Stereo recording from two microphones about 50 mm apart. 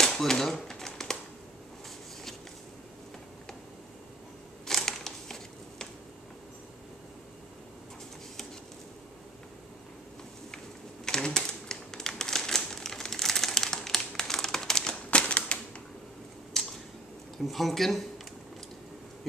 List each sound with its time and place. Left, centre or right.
0.0 s typewriter: centre
4.6 s a sound: centre
11.1 s typewriter: centre
15.0 s typewriter: left
16.5 s a sound: centre
17.5 s speech: centre